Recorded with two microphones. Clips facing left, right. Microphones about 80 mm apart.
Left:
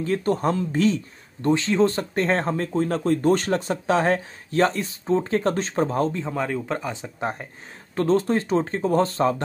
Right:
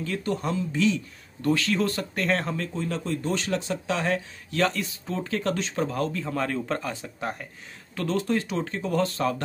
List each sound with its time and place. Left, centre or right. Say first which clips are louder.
0.0 s speech: left 6 dB; left
1.4 s speech: left 5 dB; left
6.3 s speech: left 2 dB; centre; by 9.4 s left